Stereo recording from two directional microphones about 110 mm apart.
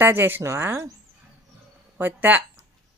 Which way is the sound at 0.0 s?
20° right (ahead or behind).